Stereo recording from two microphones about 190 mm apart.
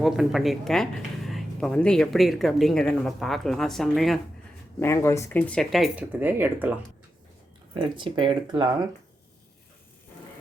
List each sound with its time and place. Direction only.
0.0 s speech: centre (ahead or behind)
4.8 s speech: 15° left (ahead or behind); by 6.7 s 10° right (ahead or behind)
7.7 s speech: 25° right (ahead or behind)